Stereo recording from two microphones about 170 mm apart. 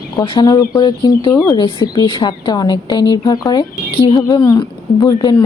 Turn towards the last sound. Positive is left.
turn(degrees=25)  # may be behind; listen again after turning